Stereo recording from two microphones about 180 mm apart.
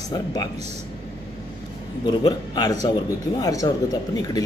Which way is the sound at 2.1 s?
20° left (ahead or behind).